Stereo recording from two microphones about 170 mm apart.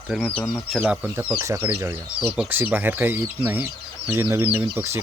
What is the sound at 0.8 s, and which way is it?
Speech, 15° right (ahead or behind).